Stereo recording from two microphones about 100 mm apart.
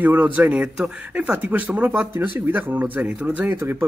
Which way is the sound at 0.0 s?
15° right (ahead or behind).